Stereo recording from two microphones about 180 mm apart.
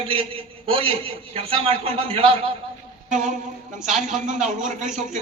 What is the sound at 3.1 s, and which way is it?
Speech, 45° right (ahead or behind).